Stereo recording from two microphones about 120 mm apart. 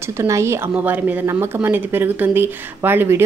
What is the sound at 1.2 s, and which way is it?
Speech, 25° right (ahead or behind).